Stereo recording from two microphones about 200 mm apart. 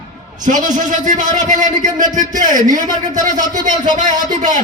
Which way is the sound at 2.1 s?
20° right (ahead or behind).